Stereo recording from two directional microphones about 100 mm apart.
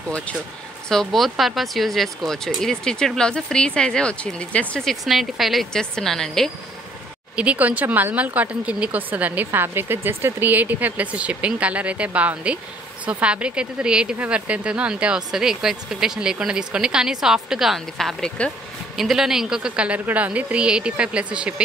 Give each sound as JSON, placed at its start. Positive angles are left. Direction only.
{"t": 0.8, "sound": "speech", "side_deg": 0}
{"t": 7.3, "sound": "speech", "side_deg": -15}